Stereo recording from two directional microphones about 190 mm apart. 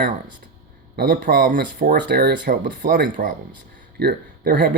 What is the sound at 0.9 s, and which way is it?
Speech, 50° right (ahead or behind).